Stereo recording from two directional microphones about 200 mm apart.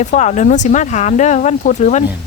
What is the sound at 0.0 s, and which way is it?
Speech, 35° left (ahead or behind).